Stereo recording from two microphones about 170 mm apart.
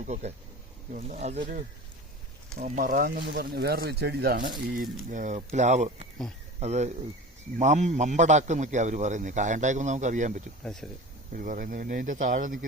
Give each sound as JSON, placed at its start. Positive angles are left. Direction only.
{"t": 0.0, "sound": "a man's voice", "side_deg": -40}
{"t": 4.7, "sound": "a man's voice", "side_deg": -50}
{"t": 10.6, "sound": "speech", "side_deg": 5}
{"t": 11.3, "sound": "a man's voice", "side_deg": -55}